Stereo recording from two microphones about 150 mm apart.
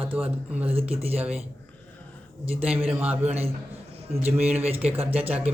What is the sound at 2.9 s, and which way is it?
Speech, 10° right (ahead or behind).